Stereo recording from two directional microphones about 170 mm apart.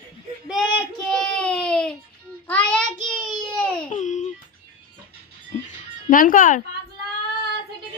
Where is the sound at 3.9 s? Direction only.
45° left (ahead or behind).